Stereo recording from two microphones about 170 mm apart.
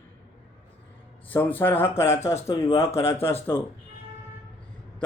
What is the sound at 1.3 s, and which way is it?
Speech, 10° left (ahead or behind).